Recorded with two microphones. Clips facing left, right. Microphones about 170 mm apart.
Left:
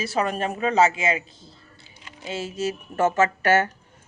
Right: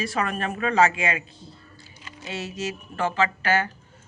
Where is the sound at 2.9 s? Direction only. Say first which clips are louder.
Left 5 dB; 45° left (ahead or behind).